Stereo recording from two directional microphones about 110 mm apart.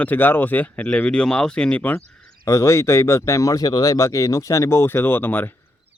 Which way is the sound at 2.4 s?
30° left (ahead or behind).